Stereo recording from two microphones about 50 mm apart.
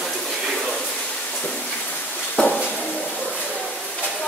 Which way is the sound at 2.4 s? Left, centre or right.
Left.